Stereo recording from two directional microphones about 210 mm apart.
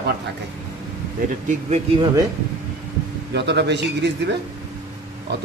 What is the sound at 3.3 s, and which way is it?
Speech, 55° right (ahead or behind).